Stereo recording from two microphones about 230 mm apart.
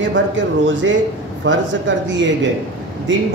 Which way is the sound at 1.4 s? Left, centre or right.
Right.